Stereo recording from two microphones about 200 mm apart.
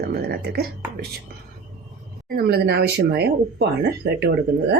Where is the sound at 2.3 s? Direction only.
55° right (ahead or behind).